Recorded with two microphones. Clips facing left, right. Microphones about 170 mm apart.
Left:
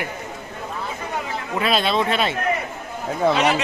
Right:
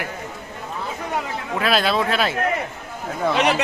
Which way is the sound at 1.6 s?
Centre (ahead or behind).